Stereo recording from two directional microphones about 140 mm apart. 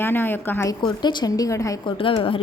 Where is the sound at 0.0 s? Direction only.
15° left (ahead or behind).